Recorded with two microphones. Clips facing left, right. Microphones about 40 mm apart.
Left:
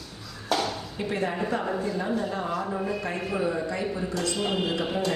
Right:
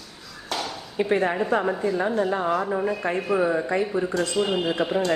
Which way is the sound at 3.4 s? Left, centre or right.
Right.